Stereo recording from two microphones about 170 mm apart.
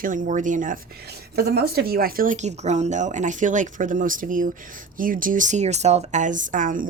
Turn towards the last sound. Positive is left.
turn(degrees=-50)  # may be behind; listen again after turning